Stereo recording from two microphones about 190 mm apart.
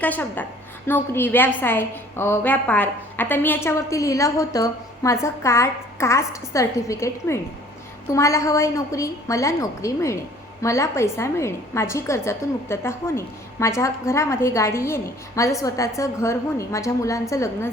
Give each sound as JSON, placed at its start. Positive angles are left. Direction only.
{"t": 0.0, "sound": "a woman's voice", "side_deg": 10}